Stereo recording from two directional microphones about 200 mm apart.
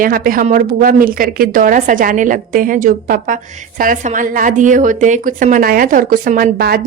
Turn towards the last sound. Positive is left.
turn(degrees=-50)  # may be behind; listen again after turning